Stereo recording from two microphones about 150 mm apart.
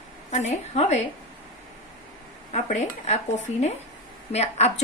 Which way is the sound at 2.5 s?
50° left (ahead or behind).